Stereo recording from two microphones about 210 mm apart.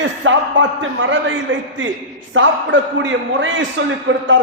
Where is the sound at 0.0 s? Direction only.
65° right (ahead or behind).